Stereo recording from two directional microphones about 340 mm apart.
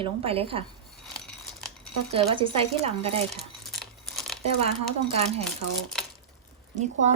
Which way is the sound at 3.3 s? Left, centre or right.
Centre.